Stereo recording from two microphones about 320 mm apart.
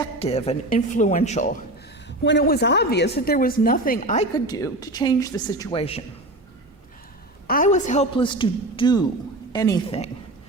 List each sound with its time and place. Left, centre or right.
0.0 s a woman's voice: centre
2.0 s a woman's voice: left; by 6.0 s centre
7.4 s a man's voice: left